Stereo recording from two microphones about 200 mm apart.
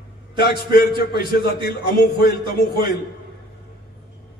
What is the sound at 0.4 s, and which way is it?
A man's voice, 50° left (ahead or behind).